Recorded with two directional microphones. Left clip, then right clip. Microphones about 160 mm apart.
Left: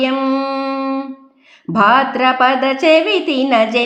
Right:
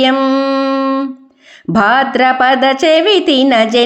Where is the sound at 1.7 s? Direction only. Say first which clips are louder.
Right 1 dB; 25° right (ahead or behind).